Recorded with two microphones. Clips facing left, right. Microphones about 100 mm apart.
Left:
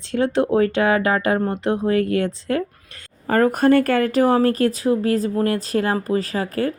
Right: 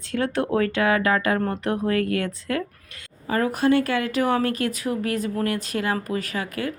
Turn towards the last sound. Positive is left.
turn(degrees=35)  # may be behind; listen again after turning